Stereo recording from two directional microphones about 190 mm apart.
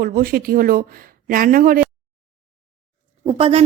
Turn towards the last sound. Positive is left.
turn(degrees=-30)  # may be behind; listen again after turning